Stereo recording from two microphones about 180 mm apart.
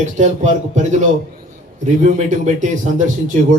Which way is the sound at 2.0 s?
40° right (ahead or behind).